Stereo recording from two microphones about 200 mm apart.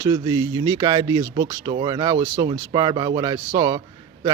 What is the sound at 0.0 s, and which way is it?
Speech, 20° right (ahead or behind).